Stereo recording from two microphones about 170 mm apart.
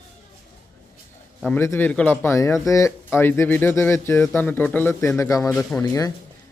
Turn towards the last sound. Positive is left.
turn(degrees=20)  # may be behind; listen again after turning